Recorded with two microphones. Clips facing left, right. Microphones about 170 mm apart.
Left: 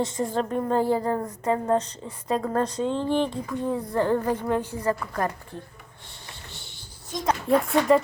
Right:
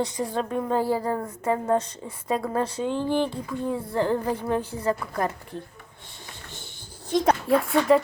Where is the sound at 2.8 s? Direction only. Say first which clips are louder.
Right 1 dB; 25° left (ahead or behind).